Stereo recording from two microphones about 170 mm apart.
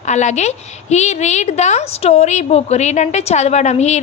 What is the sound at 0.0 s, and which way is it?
A woman's voice, 45° left (ahead or behind).